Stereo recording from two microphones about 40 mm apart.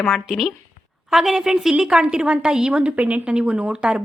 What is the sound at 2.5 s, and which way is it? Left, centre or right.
Speech, centre.